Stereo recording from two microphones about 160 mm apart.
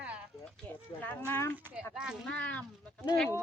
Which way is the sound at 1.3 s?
15° left (ahead or behind).